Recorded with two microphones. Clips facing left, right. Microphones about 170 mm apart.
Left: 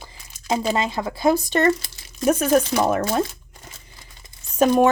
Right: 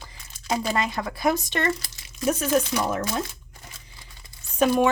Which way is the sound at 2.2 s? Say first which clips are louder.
Left 5 dB; 55° left (ahead or behind).